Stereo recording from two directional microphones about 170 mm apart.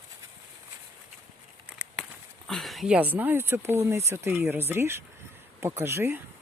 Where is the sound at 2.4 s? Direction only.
Centre (ahead or behind); by 6.2 s 15° right (ahead or behind).